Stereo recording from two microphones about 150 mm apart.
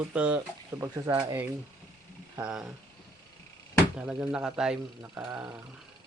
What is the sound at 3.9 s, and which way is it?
Speech, 5° right (ahead or behind).